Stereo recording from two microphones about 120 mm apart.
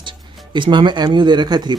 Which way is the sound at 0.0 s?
40° right (ahead or behind).